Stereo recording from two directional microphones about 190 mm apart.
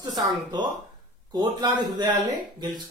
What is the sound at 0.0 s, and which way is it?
Speech, 20° right (ahead or behind).